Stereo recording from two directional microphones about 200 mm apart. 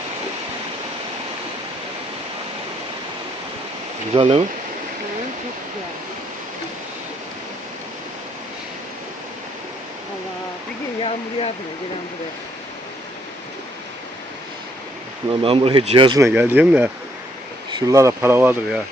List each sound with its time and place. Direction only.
4.1 s speech: 30° right (ahead or behind)
11.0 s a sound: 30° left (ahead or behind)
15.3 s speech: 25° right (ahead or behind)
16.2 s speech: 10° right (ahead or behind)